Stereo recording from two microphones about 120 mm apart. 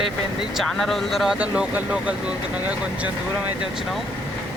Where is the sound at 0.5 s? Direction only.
Centre (ahead or behind).